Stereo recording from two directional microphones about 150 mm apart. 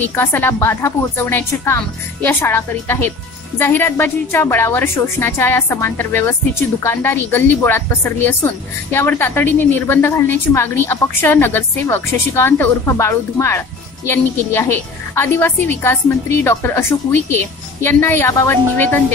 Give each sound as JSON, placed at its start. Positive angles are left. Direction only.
{"t": 0.1, "sound": "a woman's voice", "side_deg": 15}